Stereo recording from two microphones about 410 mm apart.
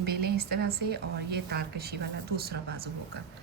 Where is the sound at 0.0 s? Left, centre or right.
Right.